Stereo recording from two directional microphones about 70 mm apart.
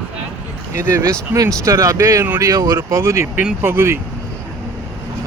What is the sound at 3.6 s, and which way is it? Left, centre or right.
Speech, right.